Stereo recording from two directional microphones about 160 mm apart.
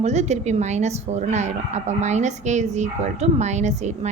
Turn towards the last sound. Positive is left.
turn(degrees=-45)  # may be behind; listen again after turning